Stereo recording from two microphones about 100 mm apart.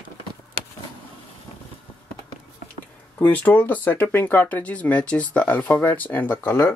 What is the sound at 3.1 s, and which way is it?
Speech, 15° left (ahead or behind).